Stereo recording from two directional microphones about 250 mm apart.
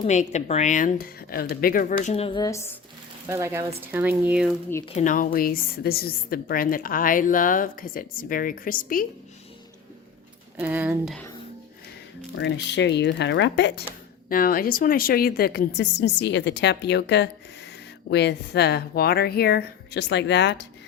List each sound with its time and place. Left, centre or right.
0.1 s a woman's voice: left; by 2.7 s centre
3.2 s speech: centre
4.9 s a woman's voice: left
10.6 s speech: centre
12.4 s a woman's voice: left